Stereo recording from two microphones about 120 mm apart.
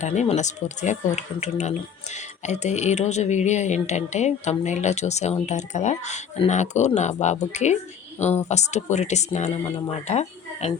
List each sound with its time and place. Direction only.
0.0 s speech: 75° left (ahead or behind)